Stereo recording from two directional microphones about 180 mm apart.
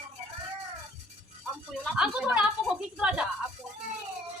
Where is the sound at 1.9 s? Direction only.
5° right (ahead or behind).